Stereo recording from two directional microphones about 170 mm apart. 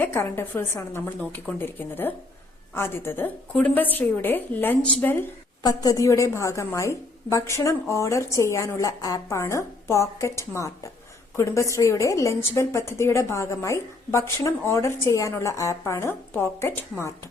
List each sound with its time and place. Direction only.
0.0 s a woman's voice: 15° left (ahead or behind)
5.6 s a woman's voice: 20° left (ahead or behind)